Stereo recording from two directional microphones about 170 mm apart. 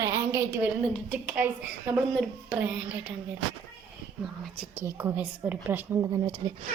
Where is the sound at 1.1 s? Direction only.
10° right (ahead or behind).